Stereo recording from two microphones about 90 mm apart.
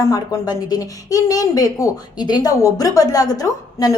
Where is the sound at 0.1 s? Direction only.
45° left (ahead or behind).